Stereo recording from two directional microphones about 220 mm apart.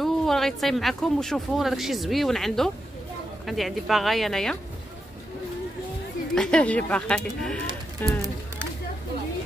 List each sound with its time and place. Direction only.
0.0 s speech: centre (ahead or behind)
6.3 s speech: 5° left (ahead or behind)